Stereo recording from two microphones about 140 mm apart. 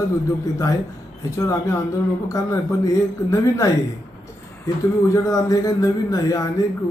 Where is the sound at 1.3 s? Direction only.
20° left (ahead or behind).